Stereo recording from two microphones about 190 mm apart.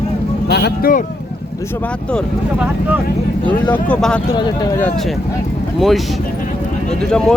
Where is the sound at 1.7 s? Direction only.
5° left (ahead or behind).